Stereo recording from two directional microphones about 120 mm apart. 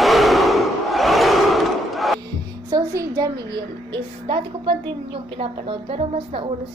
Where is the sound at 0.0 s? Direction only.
Centre (ahead or behind).